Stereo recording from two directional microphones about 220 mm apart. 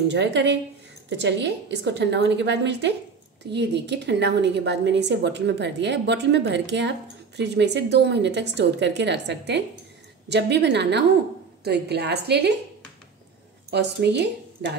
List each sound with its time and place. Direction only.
0.1 s a woman's voice: 50° right (ahead or behind)
13.7 s a woman's voice: 50° right (ahead or behind)